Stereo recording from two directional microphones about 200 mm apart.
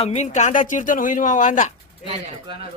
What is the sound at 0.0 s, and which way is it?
Speech, 35° left (ahead or behind).